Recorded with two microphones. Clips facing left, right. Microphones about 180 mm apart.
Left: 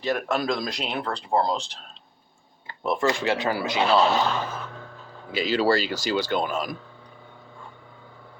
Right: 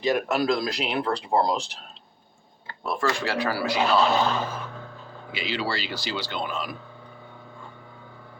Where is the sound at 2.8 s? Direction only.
20° left (ahead or behind).